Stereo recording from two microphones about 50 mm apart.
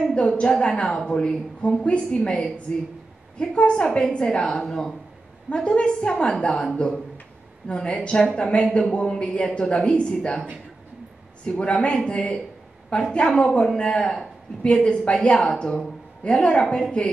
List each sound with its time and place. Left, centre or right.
0.0 s a woman's voice: centre
5.5 s a woman's voice: left